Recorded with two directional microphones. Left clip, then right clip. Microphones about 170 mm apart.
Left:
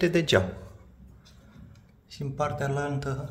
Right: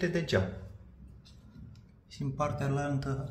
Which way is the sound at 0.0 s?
45° left (ahead or behind).